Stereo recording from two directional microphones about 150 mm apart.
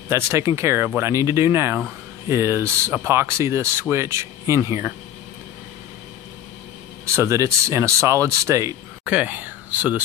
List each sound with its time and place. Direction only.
0.1 s speech: 15° right (ahead or behind)
7.2 s speech: 20° right (ahead or behind)
9.0 s speech: 10° right (ahead or behind)